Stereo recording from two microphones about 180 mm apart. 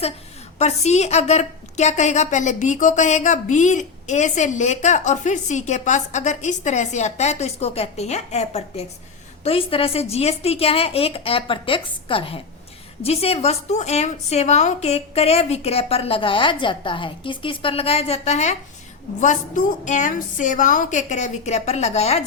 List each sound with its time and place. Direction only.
0.6 s a woman's voice: 35° left (ahead or behind)